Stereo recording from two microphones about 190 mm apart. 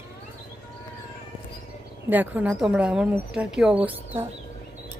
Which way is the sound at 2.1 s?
10° right (ahead or behind).